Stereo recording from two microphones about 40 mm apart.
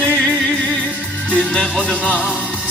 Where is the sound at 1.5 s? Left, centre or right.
Left.